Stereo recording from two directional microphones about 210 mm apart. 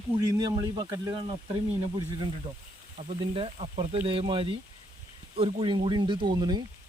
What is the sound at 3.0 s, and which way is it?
Speech, 30° right (ahead or behind).